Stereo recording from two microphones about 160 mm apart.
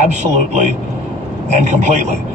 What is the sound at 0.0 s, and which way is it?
Speech, 45° right (ahead or behind).